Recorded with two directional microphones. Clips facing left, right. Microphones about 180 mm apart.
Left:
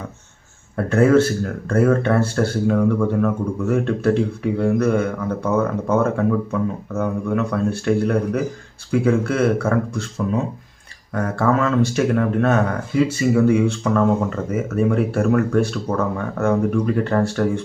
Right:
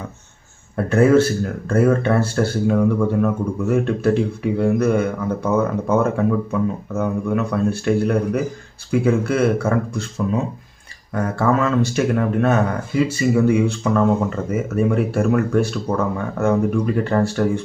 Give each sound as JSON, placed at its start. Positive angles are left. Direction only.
{"t": 0.8, "sound": "speech", "side_deg": -5}
{"t": 11.1, "sound": "speech", "side_deg": -5}